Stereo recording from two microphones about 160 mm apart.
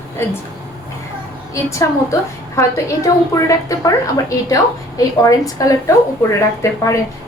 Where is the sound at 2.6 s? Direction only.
20° left (ahead or behind).